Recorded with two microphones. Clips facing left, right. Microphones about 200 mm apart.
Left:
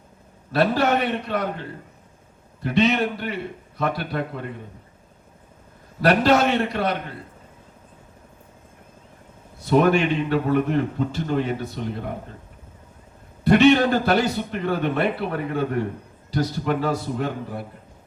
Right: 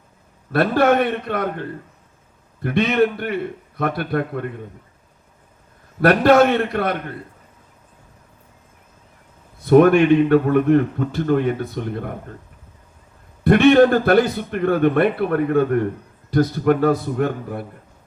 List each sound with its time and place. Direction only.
0.5 s a man's voice: 55° right (ahead or behind)
6.0 s a man's voice: 55° right (ahead or behind)
9.6 s a man's voice: 55° right (ahead or behind)
13.4 s a man's voice: 55° right (ahead or behind)